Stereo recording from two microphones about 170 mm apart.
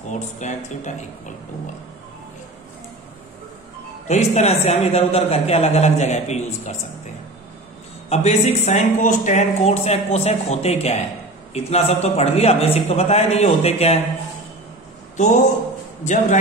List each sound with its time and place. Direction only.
0.1 s speech: 45° left (ahead or behind)
4.1 s speech: 40° left (ahead or behind)
8.1 s speech: 40° left (ahead or behind)
16.0 s speech: 45° left (ahead or behind)